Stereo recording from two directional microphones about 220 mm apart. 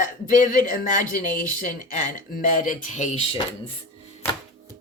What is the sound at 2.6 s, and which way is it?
Speech, 35° left (ahead or behind).